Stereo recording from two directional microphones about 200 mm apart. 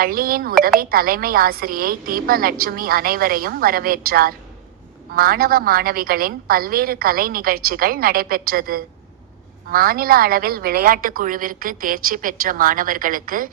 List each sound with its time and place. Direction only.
0.0 s a woman's voice: 45° right (ahead or behind)